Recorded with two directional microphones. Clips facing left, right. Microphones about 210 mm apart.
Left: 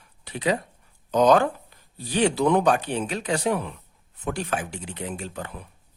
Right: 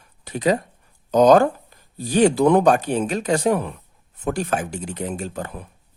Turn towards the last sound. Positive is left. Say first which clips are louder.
# right 5 dB
turn(degrees=-45)  # may be behind; listen again after turning